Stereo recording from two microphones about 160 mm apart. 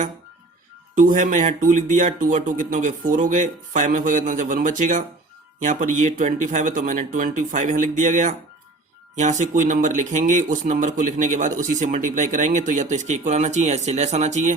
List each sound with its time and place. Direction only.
0.9 s speech: 50° right (ahead or behind)